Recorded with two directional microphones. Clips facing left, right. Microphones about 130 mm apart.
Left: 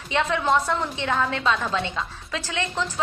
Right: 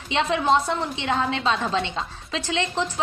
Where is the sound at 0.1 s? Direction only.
20° right (ahead or behind).